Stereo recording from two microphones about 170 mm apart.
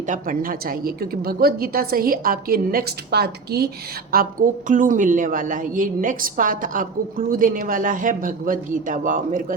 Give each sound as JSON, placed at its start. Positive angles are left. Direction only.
{"t": 0.1, "sound": "a woman's voice", "side_deg": -55}
{"t": 4.1, "sound": "a woman's voice", "side_deg": -60}